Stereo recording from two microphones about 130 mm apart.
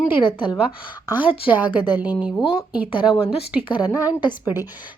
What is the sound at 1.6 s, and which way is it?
Speech, 35° left (ahead or behind).